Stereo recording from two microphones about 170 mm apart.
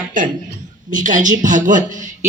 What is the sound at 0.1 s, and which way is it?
Speech, 50° right (ahead or behind).